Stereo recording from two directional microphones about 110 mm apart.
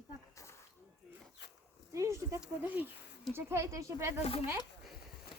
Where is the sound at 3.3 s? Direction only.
25° right (ahead or behind).